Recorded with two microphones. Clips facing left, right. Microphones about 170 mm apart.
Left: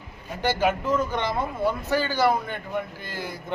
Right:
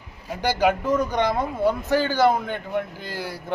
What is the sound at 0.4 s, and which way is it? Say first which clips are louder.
A man's voice: right 2 dB; 15° right (ahead or behind).